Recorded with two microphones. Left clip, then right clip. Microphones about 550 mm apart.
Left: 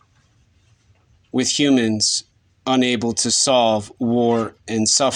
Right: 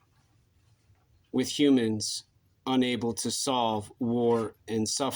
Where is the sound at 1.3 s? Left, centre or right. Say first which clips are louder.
Left 7 dB; centre.